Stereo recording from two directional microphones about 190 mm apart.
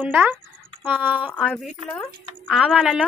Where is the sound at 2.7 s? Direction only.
5° right (ahead or behind).